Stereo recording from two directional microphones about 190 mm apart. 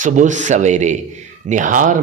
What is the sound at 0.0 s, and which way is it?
A man's voice, 40° right (ahead or behind).